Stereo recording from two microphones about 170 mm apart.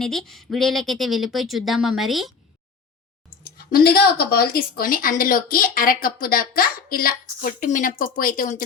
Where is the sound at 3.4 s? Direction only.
60° left (ahead or behind).